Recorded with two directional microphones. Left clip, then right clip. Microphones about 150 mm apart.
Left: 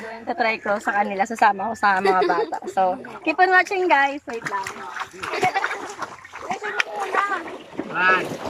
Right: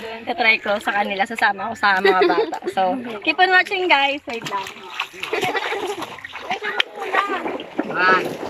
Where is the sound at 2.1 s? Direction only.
15° right (ahead or behind).